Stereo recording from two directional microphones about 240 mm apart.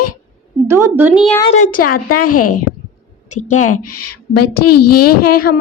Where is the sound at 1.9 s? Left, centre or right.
Left.